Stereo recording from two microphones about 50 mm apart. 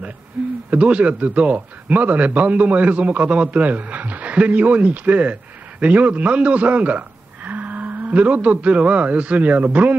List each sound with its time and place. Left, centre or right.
0.7 s a man's voice: right